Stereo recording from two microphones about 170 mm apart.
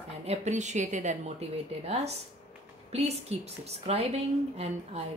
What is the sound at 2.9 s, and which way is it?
A woman's voice, 40° right (ahead or behind).